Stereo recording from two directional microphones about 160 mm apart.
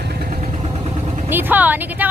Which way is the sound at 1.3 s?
10° right (ahead or behind).